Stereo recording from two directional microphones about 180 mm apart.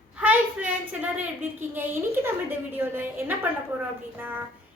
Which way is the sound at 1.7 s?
10° right (ahead or behind).